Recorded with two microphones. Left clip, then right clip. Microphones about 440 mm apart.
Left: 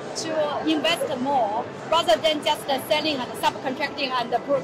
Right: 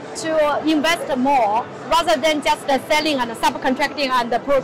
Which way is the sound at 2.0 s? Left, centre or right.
Right.